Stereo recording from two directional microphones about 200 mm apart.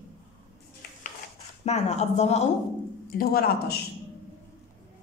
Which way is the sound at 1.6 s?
35° left (ahead or behind).